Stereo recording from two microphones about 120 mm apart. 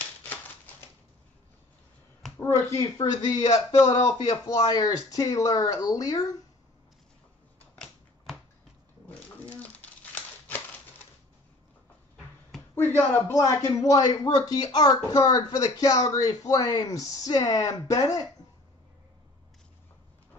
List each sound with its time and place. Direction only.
2.3 s speech: 20° left (ahead or behind)
9.0 s a sound: 15° left (ahead or behind)
12.7 s speech: 15° left (ahead or behind)